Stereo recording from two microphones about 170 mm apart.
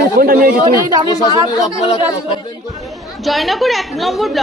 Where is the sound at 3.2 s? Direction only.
Centre (ahead or behind).